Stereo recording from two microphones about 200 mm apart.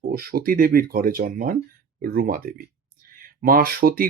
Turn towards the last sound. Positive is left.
turn(degrees=-45)  # may be behind; listen again after turning